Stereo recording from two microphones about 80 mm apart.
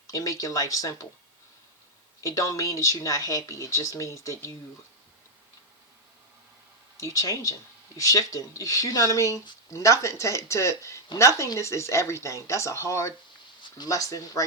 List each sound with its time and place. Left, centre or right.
0.1 s speech: left
2.2 s speech: left
6.9 s speech: left
13.6 s a sound: left
13.9 s speech: left